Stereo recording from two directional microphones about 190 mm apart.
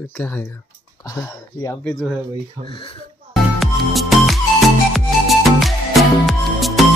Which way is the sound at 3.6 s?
Centre (ahead or behind).